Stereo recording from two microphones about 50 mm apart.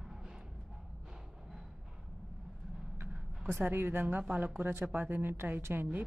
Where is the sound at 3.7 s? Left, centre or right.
Right.